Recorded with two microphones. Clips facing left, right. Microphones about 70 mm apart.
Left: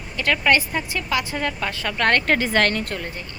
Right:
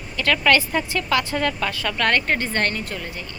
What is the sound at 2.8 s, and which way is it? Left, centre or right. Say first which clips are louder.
Speech: left 2 dB; left.